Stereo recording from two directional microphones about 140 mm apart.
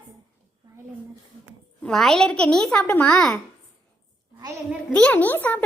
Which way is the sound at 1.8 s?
5° left (ahead or behind).